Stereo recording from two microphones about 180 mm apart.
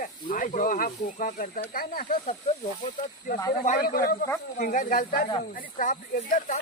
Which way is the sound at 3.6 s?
50° left (ahead or behind).